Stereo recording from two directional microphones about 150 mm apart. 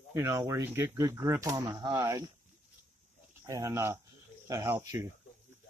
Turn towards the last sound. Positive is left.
turn(degrees=-15)  # may be behind; listen again after turning